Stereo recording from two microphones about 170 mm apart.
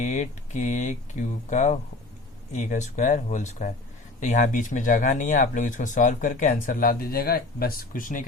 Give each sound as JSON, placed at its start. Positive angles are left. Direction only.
{"t": 0.0, "sound": "speech", "side_deg": 45}